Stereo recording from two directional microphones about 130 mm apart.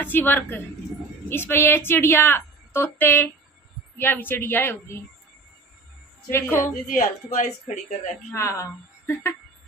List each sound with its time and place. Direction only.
0.0 s a woman's voice: 15° left (ahead or behind)
6.3 s a woman's voice: 20° left (ahead or behind)
6.7 s speech: 90° left; by 8.1 s 65° left (ahead or behind)
8.4 s a woman's voice: 20° left (ahead or behind)